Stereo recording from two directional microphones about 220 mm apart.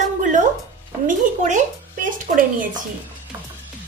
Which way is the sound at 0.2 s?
35° right (ahead or behind).